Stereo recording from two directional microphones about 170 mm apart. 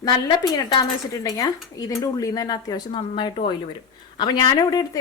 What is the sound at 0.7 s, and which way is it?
A woman's voice, 20° left (ahead or behind).